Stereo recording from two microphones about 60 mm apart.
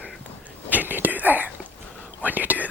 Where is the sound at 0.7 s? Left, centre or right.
Right.